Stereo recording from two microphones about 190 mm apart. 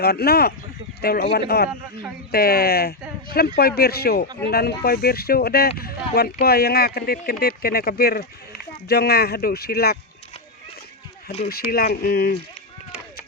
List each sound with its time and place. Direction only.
0.0 s speech: 55° left (ahead or behind)
11.4 s speech: 50° left (ahead or behind)